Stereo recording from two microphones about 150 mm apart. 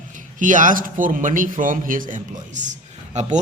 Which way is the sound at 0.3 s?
60° right (ahead or behind).